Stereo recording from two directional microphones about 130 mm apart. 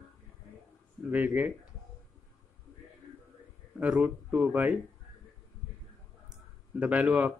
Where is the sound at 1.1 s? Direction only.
15° right (ahead or behind).